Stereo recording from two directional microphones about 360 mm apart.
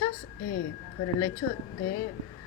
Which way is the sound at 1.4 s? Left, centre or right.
Left.